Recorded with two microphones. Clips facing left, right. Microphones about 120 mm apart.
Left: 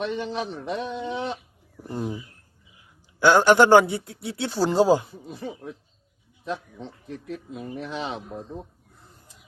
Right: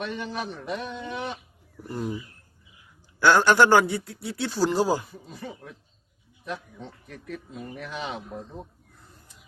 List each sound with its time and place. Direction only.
0.0 s a man's voice: 25° left (ahead or behind)
3.2 s speech: 20° left (ahead or behind)